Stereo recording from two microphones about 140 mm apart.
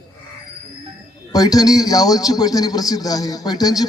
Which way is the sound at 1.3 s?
25° left (ahead or behind).